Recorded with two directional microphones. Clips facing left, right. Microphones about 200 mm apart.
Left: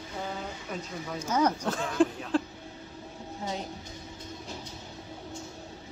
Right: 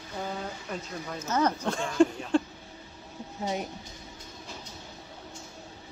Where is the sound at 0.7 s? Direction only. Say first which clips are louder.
Even; centre (ahead or behind).